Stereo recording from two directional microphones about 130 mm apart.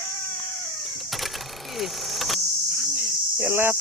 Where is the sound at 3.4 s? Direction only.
15° right (ahead or behind).